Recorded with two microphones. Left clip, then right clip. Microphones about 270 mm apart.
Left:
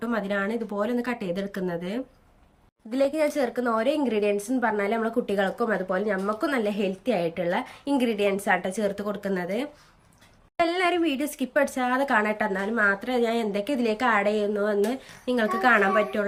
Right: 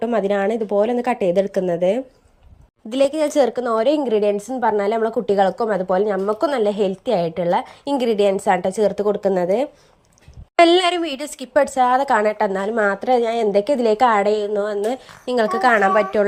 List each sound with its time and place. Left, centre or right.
0.0 s speech: centre
2.9 s a woman's voice: right